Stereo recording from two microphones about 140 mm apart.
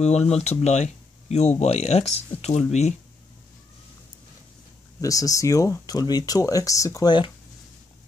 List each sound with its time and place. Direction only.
0.4 s speech: 50° left (ahead or behind)
5.0 s speech: 25° left (ahead or behind)